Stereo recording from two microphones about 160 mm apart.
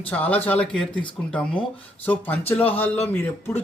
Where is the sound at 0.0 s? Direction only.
10° left (ahead or behind).